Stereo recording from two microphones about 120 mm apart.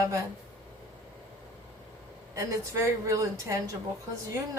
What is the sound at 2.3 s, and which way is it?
A woman's voice, 25° right (ahead or behind).